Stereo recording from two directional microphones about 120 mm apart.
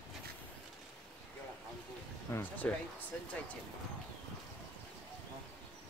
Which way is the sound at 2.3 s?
15° left (ahead or behind).